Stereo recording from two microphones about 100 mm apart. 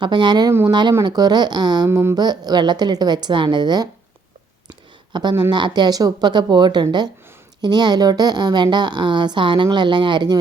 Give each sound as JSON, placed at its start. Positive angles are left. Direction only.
{"t": 0.0, "sound": "a woman's voice", "side_deg": -50}
{"t": 1.9, "sound": "speech", "side_deg": -25}
{"t": 2.1, "sound": "a woman's voice", "side_deg": -40}
{"t": 5.1, "sound": "a woman's voice", "side_deg": -50}